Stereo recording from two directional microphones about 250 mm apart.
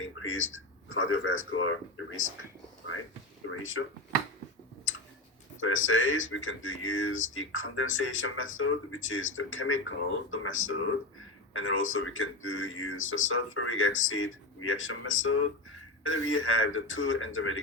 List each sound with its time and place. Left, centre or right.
0.0 s speech: left
3.4 s speech: left
5.5 s speech: left